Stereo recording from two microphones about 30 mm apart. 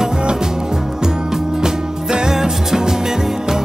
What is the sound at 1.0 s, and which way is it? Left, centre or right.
Music, right.